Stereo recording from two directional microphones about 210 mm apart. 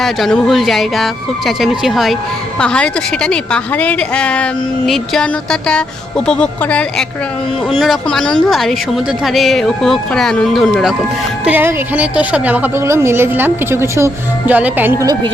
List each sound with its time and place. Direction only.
0.0 s a woman's voice: centre (ahead or behind); by 15.3 s 20° right (ahead or behind)